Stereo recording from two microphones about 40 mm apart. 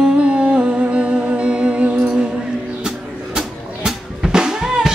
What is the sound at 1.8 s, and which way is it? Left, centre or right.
Music, right.